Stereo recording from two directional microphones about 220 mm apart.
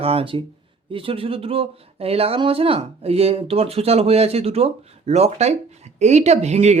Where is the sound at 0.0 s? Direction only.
25° right (ahead or behind).